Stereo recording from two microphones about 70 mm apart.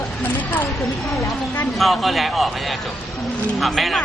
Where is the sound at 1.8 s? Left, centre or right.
Centre.